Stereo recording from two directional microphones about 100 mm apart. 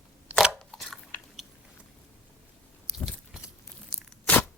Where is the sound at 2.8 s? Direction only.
5° right (ahead or behind).